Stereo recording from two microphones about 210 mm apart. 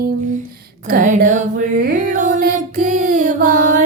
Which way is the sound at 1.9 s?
35° right (ahead or behind).